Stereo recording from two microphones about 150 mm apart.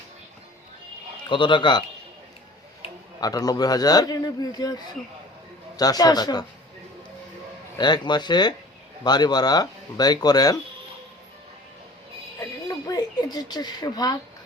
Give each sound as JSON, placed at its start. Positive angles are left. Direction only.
{"t": 1.3, "sound": "a man's voice", "side_deg": 30}
{"t": 3.2, "sound": "a man's voice", "side_deg": 25}
{"t": 7.8, "sound": "a man's voice", "side_deg": 30}
{"t": 12.4, "sound": "a sound", "side_deg": 25}